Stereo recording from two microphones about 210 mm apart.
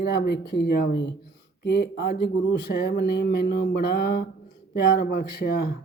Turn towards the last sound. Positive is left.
turn(degrees=50)  # may be behind; listen again after turning